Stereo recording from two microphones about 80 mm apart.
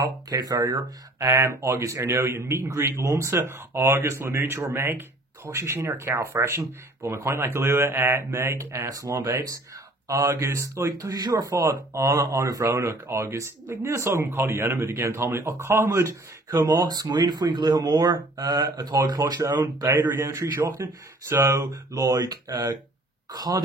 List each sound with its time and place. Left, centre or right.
0.0 s speech: right
1.2 s speech: right
16.8 s speech: right
20.6 s speech: right